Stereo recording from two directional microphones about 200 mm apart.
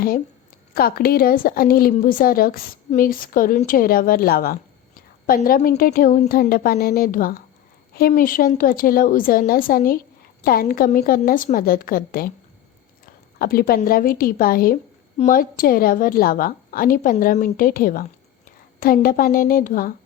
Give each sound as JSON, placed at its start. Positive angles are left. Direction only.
{"t": 0.7, "sound": "a woman's voice", "side_deg": 50}
{"t": 13.4, "sound": "a woman's voice", "side_deg": 50}